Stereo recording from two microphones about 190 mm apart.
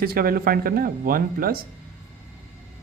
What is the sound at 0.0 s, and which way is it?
Speech, 50° right (ahead or behind).